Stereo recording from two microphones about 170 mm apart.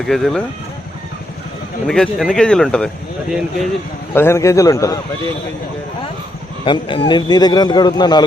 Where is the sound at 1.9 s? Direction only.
5° left (ahead or behind); by 5.0 s 20° left (ahead or behind).